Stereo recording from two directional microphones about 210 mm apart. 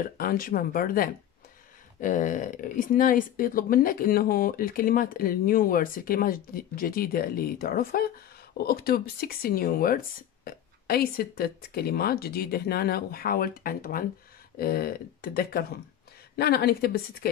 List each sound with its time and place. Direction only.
0.0 s speech: 45° left (ahead or behind)